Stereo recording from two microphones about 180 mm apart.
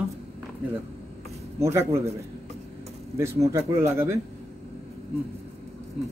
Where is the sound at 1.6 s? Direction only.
15° right (ahead or behind).